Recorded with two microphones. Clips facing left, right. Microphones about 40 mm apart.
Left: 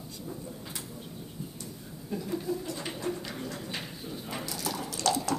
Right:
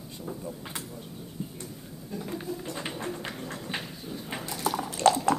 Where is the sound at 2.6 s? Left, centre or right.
Right.